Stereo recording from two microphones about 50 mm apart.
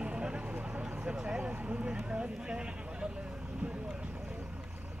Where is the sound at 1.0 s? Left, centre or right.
Right.